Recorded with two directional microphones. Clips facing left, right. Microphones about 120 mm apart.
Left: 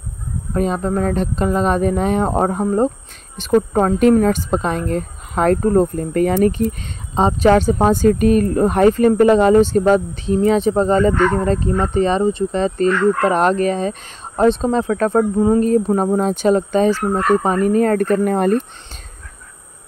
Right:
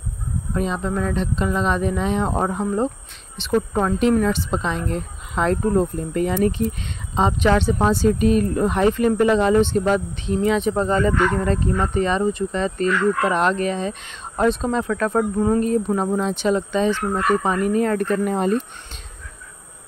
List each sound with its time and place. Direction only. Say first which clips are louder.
0.6 s speech: left 5 dB; 45° left (ahead or behind)
7.2 s speech: left 5 dB; 35° left (ahead or behind)
14.3 s speech: left 5 dB; 30° left (ahead or behind); by 18.6 s 55° left (ahead or behind)